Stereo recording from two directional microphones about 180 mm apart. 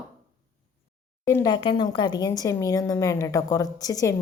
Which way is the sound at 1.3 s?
20° left (ahead or behind).